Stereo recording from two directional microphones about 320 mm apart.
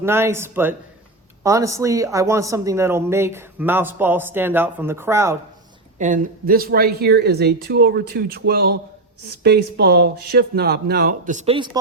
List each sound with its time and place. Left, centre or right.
0.0 s a woman's voice: centre
6.0 s speech: right